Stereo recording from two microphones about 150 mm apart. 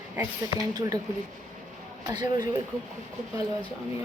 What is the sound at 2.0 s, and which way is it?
Speech, 25° right (ahead or behind).